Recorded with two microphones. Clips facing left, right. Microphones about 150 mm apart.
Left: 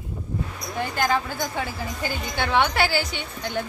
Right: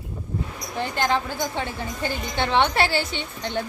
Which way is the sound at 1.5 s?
5° left (ahead or behind).